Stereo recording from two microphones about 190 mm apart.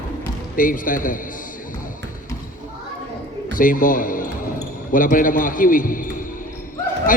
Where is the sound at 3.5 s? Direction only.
45° left (ahead or behind).